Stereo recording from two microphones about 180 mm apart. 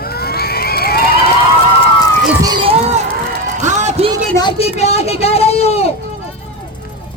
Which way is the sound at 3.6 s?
40° right (ahead or behind).